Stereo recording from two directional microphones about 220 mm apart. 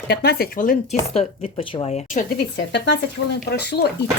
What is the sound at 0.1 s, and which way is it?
Speech, 45° left (ahead or behind).